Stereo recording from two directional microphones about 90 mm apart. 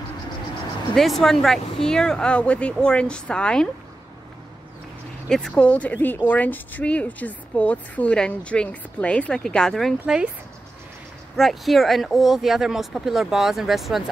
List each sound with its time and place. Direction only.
0.9 s speech: 5° left (ahead or behind)
5.5 s speech: 15° left (ahead or behind)
10.0 s speech: 10° right (ahead or behind)
11.3 s speech: centre (ahead or behind)